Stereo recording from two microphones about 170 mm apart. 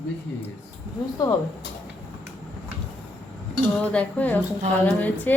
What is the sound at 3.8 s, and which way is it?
Speech, 5° left (ahead or behind).